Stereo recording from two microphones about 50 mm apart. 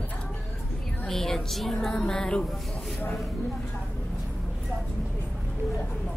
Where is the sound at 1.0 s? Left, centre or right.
Centre.